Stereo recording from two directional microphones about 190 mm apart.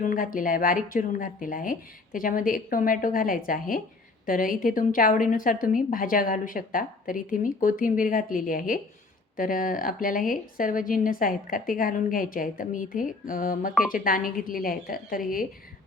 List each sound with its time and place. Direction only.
0.0 s a woman's voice: 45° left (ahead or behind)